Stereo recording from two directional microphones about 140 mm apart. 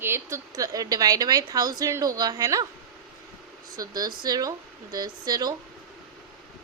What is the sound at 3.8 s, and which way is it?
A woman's voice, 25° right (ahead or behind).